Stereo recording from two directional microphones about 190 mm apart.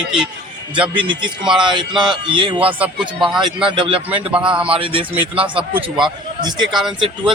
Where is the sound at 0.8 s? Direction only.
25° right (ahead or behind).